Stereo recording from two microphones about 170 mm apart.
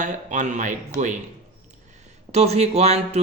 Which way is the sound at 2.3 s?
40° right (ahead or behind).